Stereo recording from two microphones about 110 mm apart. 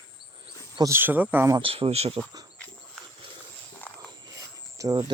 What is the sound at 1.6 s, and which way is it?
Speech, 60° right (ahead or behind).